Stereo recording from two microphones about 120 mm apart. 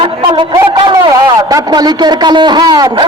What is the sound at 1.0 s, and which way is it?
A man's voice, 30° right (ahead or behind).